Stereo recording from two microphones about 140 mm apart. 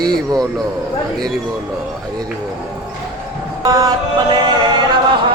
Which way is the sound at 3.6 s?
25° right (ahead or behind).